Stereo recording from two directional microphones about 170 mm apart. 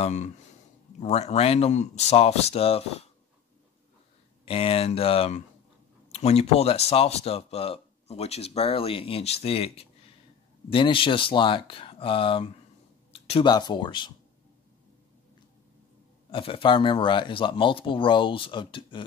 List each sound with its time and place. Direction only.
0.0 s speech: 40° left (ahead or behind)
4.5 s speech: 35° left (ahead or behind)
13.1 s a sound: 35° left (ahead or behind)
13.5 s speech: 25° left (ahead or behind)
16.3 s speech: 30° left (ahead or behind)